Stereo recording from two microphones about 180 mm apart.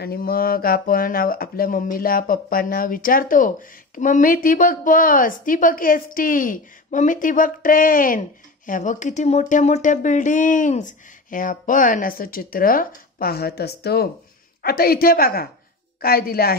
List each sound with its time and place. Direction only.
0.0 s speech: 55° left (ahead or behind)